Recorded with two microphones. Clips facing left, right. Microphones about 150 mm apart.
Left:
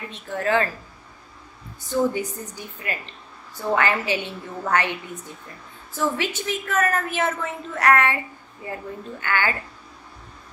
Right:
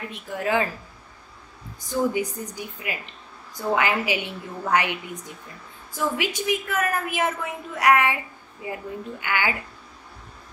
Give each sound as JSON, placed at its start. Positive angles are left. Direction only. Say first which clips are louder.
{"t": 0.1, "sound": "a woman's voice", "louder": "left 2 dB", "side_deg": -10}
{"t": 1.8, "sound": "a woman's voice", "louder": "left 1 dB", "side_deg": -10}